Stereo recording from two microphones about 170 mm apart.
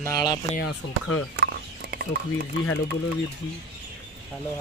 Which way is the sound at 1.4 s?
75° right (ahead or behind).